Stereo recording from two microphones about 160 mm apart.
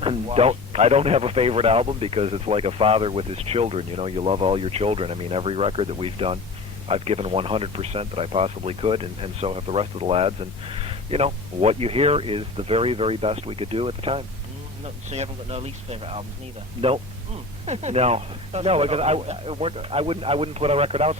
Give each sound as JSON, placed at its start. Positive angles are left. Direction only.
{"t": 0.0, "sound": "speech", "side_deg": -35}
{"t": 17.7, "sound": "speech", "side_deg": -40}